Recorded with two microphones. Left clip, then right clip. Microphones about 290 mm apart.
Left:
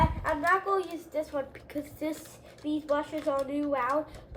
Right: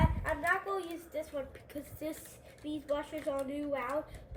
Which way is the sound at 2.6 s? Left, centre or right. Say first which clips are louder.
Left 8 dB; left.